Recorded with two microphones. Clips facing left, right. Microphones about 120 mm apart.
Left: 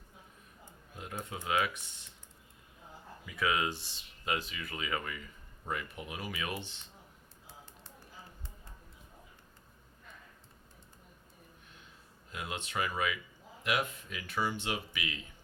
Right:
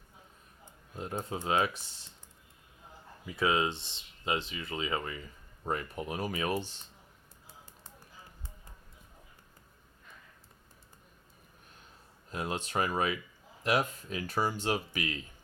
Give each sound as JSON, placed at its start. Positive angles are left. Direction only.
{"t": 0.9, "sound": "speech", "side_deg": -30}
{"t": 3.2, "sound": "speech", "side_deg": -30}
{"t": 5.6, "sound": "speech", "side_deg": -40}
{"t": 12.3, "sound": "speech", "side_deg": -40}